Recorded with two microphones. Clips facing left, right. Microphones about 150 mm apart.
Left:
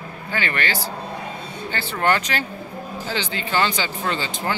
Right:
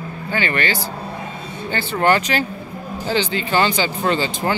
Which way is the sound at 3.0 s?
35° right (ahead or behind).